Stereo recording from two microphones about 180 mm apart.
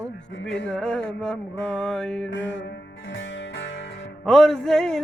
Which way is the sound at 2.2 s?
90° left.